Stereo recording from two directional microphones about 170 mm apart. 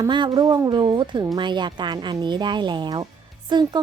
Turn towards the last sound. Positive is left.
turn(degrees=-25)  # may be behind; listen again after turning